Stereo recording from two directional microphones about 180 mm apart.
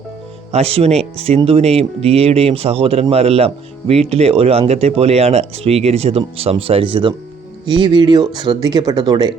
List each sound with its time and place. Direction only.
0.5 s speech: 35° right (ahead or behind)